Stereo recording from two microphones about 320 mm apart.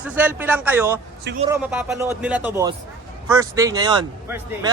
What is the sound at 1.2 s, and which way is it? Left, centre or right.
Speech, right.